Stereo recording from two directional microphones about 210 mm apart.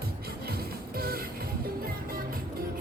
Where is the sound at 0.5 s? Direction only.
45° right (ahead or behind).